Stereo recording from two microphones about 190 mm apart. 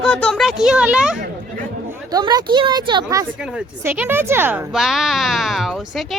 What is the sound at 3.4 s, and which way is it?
Speech, 5° right (ahead or behind).